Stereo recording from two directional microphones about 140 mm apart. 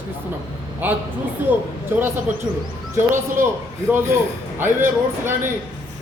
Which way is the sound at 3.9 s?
15° right (ahead or behind).